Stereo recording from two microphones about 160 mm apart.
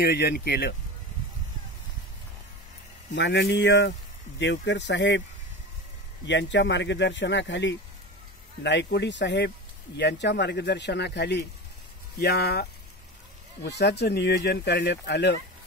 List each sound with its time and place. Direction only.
0.0 s speech: 85° left
3.2 s speech: 90° left
6.2 s speech: 90° left
8.6 s speech: 90° left